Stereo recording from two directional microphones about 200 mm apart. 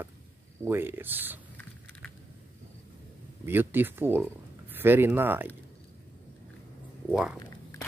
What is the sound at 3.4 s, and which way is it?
Speech, 10° right (ahead or behind).